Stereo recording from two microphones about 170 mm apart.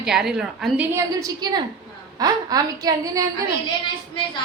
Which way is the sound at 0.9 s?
20° right (ahead or behind).